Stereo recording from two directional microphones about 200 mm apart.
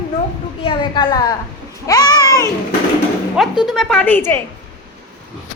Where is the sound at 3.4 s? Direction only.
Centre (ahead or behind).